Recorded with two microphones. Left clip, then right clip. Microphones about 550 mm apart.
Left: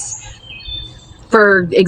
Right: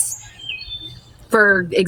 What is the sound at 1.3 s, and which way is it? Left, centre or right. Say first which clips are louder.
Speech: left 4 dB; right.